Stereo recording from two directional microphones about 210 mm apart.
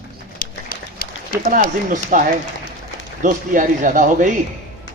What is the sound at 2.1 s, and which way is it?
A man's voice, 40° right (ahead or behind).